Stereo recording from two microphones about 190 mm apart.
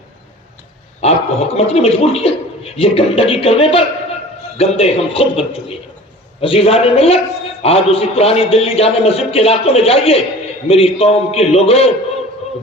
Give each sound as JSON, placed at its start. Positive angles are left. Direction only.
{"t": 1.0, "sound": "a man's voice", "side_deg": 35}